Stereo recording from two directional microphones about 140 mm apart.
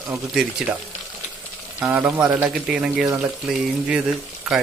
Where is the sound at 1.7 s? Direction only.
10° right (ahead or behind).